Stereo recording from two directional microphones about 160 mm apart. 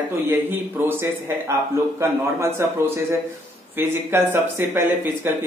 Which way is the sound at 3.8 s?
15° right (ahead or behind).